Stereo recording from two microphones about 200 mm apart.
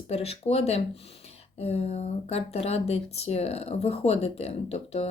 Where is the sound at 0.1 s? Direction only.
30° left (ahead or behind).